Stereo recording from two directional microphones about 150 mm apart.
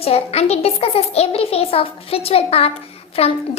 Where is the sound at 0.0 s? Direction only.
45° left (ahead or behind).